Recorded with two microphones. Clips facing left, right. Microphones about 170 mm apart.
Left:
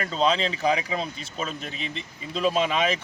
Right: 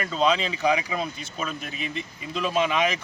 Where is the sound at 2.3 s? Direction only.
35° left (ahead or behind).